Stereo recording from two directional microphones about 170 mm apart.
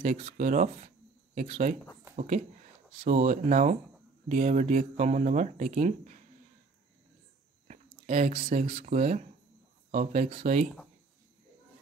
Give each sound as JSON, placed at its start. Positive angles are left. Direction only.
{"t": 0.3, "sound": "speech", "side_deg": -50}
{"t": 7.6, "sound": "chewing", "side_deg": -45}
{"t": 8.5, "sound": "speech", "side_deg": -35}